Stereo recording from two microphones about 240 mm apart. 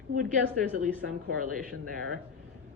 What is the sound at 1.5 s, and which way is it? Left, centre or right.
Speech, right.